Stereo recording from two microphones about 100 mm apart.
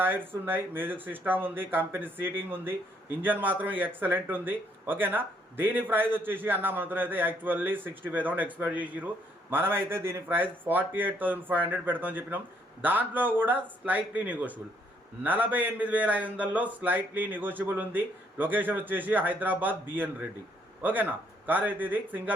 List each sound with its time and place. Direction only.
0.0 s a man's voice: 20° right (ahead or behind)